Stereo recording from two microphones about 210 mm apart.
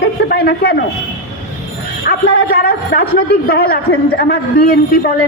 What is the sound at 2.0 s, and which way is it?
A woman's voice, 50° left (ahead or behind).